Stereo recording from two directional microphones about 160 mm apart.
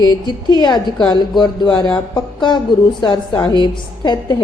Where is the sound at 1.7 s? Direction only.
5° left (ahead or behind).